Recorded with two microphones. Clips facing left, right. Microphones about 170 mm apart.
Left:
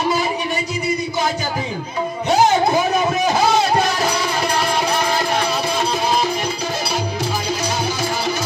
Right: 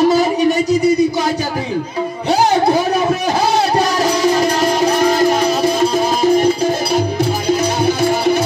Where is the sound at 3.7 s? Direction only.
40° right (ahead or behind).